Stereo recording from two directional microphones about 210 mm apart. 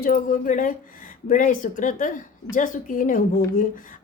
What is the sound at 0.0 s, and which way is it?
Speech, 40° left (ahead or behind).